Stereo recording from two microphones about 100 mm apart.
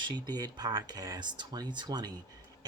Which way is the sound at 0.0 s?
45° right (ahead or behind).